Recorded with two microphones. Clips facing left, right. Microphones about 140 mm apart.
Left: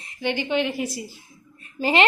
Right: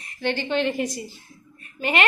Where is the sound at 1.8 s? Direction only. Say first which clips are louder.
Left 3 dB; 30° left (ahead or behind).